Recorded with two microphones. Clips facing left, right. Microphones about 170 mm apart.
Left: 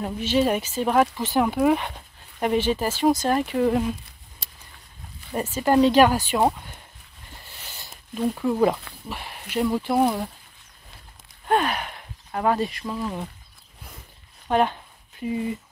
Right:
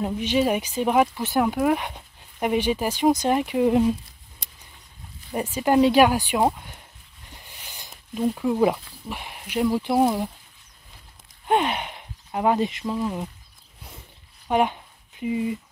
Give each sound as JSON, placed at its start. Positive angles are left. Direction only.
{"t": 0.0, "sound": "speech", "side_deg": -15}
{"t": 4.4, "sound": "vehicle", "side_deg": -20}
{"t": 5.3, "sound": "speech", "side_deg": -15}
{"t": 7.4, "sound": "a sound", "side_deg": -15}
{"t": 8.2, "sound": "speech", "side_deg": -5}
{"t": 11.4, "sound": "speech", "side_deg": -20}
{"t": 14.5, "sound": "a sound", "side_deg": -10}